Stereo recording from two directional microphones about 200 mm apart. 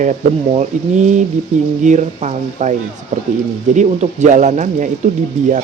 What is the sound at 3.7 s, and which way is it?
Speech, 35° right (ahead or behind).